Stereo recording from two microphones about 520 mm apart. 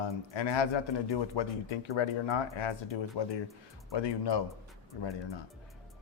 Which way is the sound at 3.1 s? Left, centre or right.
Left.